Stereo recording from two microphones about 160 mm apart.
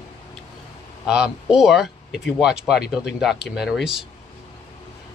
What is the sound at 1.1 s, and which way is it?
Speech, 5° right (ahead or behind).